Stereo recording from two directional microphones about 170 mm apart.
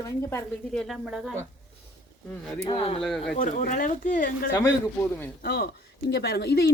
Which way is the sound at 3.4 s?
50° left (ahead or behind).